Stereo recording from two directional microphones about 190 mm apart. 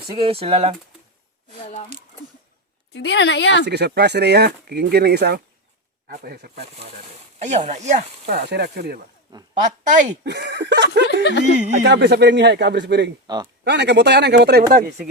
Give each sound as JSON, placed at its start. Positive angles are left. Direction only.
{"t": 0.1, "sound": "speech", "side_deg": -30}
{"t": 2.9, "sound": "a woman's voice", "side_deg": 65}
{"t": 3.7, "sound": "speech", "side_deg": -60}
{"t": 7.3, "sound": "speech", "side_deg": -40}
{"t": 8.4, "sound": "speech", "side_deg": -60}
{"t": 9.3, "sound": "speech", "side_deg": -20}
{"t": 9.8, "sound": "speech", "side_deg": -40}
{"t": 10.2, "sound": "speech", "side_deg": -65}
{"t": 11.2, "sound": "speech", "side_deg": 65}
{"t": 11.8, "sound": "speech", "side_deg": -65}
{"t": 13.2, "sound": "speech", "side_deg": -20}
{"t": 13.7, "sound": "speech", "side_deg": -65}